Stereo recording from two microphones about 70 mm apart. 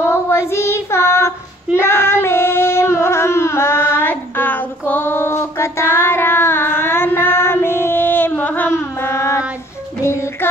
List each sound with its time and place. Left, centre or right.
0.1 s child singing: left
10.0 s child singing: left